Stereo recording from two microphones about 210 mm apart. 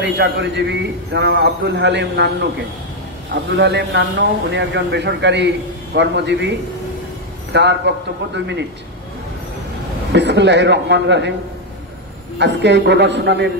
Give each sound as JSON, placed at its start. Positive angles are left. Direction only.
{"t": 0.0, "sound": "a man's voice", "side_deg": -55}
{"t": 3.5, "sound": "a man's voice", "side_deg": -55}
{"t": 7.5, "sound": "a man's voice", "side_deg": -55}
{"t": 10.1, "sound": "a man's voice", "side_deg": -55}
{"t": 12.4, "sound": "a man's voice", "side_deg": -55}